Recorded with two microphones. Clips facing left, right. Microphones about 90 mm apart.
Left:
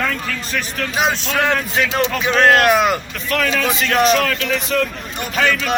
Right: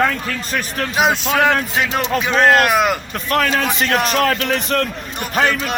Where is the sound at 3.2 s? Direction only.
45° right (ahead or behind).